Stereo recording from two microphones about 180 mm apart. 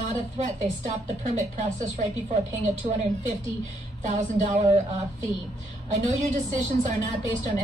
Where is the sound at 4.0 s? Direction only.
45° right (ahead or behind).